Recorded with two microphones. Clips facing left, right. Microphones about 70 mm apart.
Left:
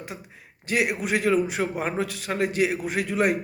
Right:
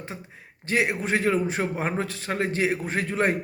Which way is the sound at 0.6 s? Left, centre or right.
Right.